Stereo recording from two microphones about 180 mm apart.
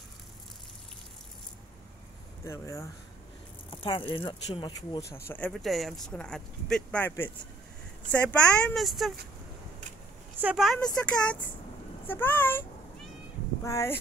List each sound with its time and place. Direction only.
2.4 s speech: 15° left (ahead or behind)
3.7 s speech: 30° left (ahead or behind)
5.1 s speech: 10° left (ahead or behind)
10.3 s speech: 5° right (ahead or behind); by 12.6 s 10° left (ahead or behind)
13.7 s speech: 15° left (ahead or behind)